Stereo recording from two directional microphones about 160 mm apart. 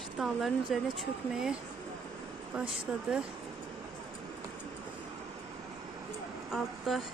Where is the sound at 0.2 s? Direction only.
Centre (ahead or behind).